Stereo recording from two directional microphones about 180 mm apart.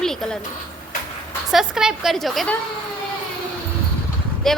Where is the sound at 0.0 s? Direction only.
5° left (ahead or behind).